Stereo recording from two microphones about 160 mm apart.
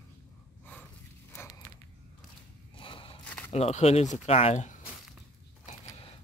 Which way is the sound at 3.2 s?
10° left (ahead or behind).